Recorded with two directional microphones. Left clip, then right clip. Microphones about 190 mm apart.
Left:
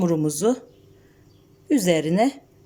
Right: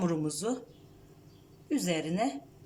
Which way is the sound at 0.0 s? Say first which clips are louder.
Left 11 dB; 30° left (ahead or behind).